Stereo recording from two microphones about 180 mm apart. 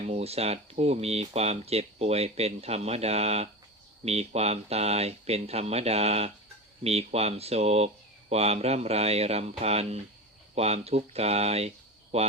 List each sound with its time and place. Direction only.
0.0 s speech: 35° right (ahead or behind)